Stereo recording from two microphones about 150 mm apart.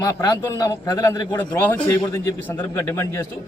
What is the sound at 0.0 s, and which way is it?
A man's voice, 25° left (ahead or behind).